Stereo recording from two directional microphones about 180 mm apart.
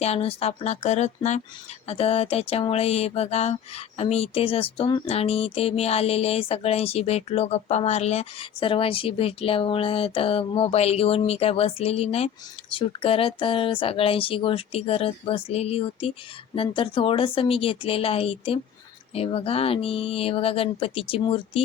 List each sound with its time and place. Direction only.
0.0 s speech: 35° left (ahead or behind)